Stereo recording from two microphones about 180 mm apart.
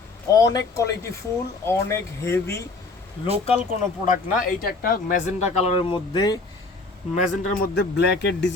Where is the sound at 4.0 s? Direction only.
50° left (ahead or behind); by 6.4 s 25° left (ahead or behind).